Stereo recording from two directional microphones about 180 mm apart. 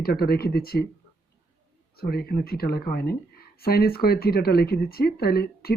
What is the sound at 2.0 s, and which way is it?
Speech, 60° left (ahead or behind).